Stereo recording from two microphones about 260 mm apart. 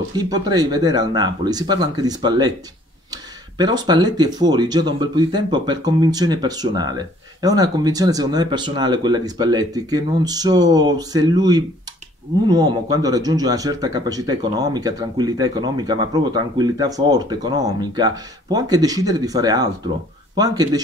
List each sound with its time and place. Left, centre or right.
0.1 s a man's voice: centre